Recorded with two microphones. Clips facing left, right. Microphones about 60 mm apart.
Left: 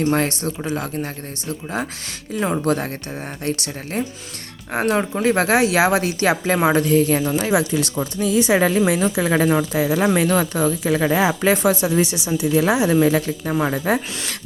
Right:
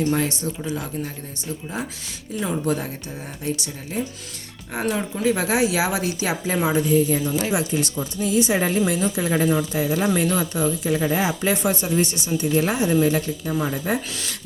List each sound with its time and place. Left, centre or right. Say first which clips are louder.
0.0 s speech: left 3 dB; left
5.5 s a woman's voice: left 5 dB; left